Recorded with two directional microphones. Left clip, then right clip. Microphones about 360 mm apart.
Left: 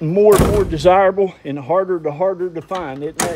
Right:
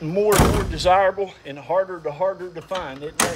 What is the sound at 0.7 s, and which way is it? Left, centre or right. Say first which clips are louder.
Speech: left 5 dB; centre.